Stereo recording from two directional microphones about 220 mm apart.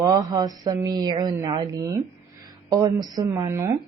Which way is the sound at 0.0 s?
15° right (ahead or behind).